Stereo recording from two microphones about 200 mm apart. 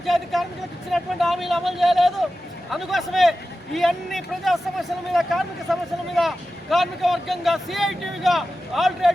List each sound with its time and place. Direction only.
0.0 s speech: centre (ahead or behind)